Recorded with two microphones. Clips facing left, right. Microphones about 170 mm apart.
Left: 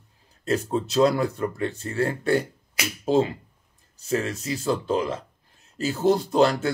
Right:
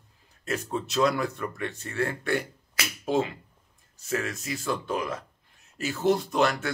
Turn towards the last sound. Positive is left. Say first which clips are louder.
# left 5 dB
turn(degrees=30)  # may be behind; listen again after turning